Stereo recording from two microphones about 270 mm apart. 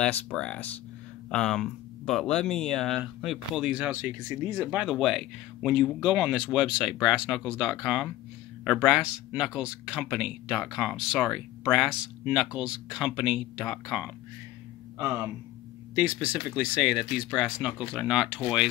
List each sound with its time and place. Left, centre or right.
0.0 s speech: centre